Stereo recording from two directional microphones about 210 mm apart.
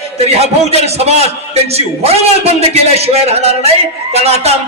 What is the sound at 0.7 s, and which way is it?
A man's voice, 30° right (ahead or behind).